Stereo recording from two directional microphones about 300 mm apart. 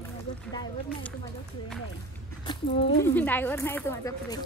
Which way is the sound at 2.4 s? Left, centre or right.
Centre.